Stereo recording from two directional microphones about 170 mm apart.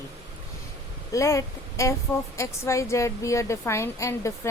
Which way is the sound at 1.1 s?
20° left (ahead or behind).